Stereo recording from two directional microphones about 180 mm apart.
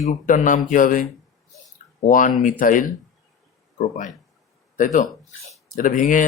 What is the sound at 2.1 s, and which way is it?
Speech, 45° left (ahead or behind).